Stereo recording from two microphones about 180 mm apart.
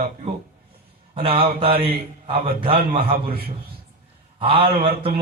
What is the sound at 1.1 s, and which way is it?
Speech, 30° right (ahead or behind).